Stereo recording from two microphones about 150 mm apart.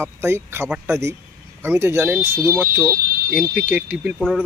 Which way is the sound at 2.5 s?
10° left (ahead or behind).